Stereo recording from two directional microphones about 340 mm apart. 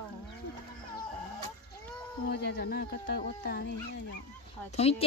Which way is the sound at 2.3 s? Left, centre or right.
Left.